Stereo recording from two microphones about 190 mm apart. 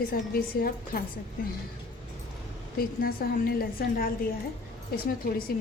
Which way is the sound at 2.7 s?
50° left (ahead or behind).